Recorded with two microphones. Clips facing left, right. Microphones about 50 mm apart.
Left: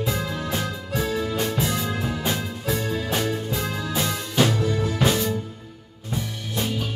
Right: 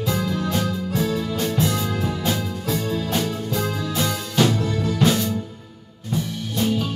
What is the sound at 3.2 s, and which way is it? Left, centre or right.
Music, centre.